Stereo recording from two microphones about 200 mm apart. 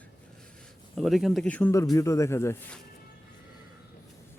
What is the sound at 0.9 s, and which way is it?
Speech, centre (ahead or behind).